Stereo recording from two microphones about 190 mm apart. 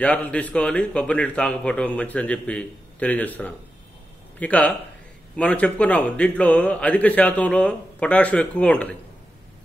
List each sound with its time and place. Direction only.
0.0 s a man's voice: 5° left (ahead or behind)